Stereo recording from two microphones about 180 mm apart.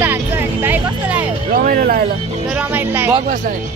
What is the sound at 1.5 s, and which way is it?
Music, 50° right (ahead or behind).